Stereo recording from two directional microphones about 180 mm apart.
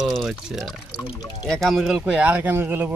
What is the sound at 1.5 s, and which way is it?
Speech, 5° left (ahead or behind).